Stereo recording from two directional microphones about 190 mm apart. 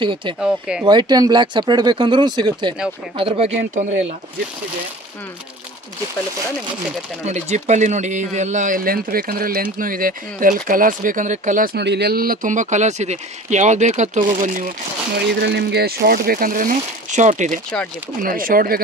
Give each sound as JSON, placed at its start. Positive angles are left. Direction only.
{"t": 0.0, "sound": "speech", "side_deg": -25}
{"t": 0.4, "sound": "speech", "side_deg": -5}
{"t": 0.8, "sound": "speech", "side_deg": -20}
{"t": 7.2, "sound": "speech", "side_deg": -35}
{"t": 15.2, "sound": "speech", "side_deg": -60}